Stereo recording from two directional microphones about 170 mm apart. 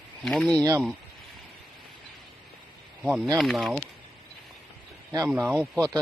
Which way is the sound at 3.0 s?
5° right (ahead or behind).